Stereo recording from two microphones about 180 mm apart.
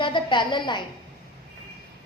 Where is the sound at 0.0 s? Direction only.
25° left (ahead or behind).